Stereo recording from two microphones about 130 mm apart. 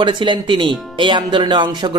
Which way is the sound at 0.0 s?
40° right (ahead or behind).